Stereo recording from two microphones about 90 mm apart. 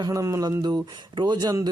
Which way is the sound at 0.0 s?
40° right (ahead or behind).